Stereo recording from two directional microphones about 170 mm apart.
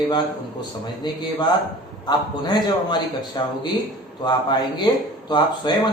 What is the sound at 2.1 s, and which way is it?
A man's voice, 25° left (ahead or behind).